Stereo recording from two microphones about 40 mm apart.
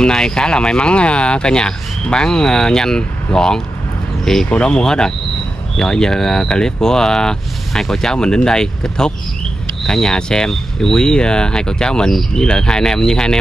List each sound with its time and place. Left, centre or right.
0.0 s speech: centre
4.5 s speech: left